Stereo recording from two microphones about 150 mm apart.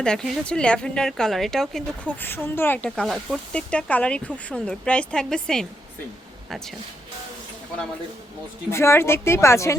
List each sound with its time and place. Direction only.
0.0 s a woman's voice: 5° left (ahead or behind)
8.7 s a woman's voice: 15° left (ahead or behind)